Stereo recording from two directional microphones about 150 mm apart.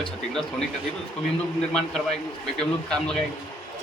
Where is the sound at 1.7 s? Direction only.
5° left (ahead or behind).